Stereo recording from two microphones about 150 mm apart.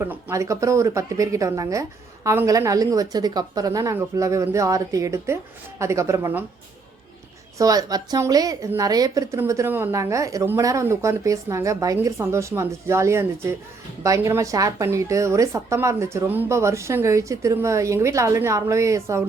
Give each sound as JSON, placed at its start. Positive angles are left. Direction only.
{"t": 0.0, "sound": "speech", "side_deg": -15}
{"t": 7.6, "sound": "speech", "side_deg": -25}